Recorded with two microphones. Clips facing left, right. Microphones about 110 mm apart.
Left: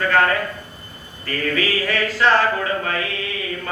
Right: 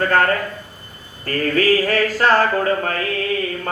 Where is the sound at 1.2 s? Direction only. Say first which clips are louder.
Right 4 dB; 45° right (ahead or behind).